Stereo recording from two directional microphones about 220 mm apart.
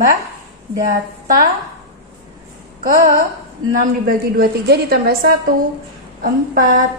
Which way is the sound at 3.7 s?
40° right (ahead or behind).